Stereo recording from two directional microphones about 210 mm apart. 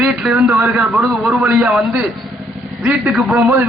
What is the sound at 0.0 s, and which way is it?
A man's voice, 5° right (ahead or behind).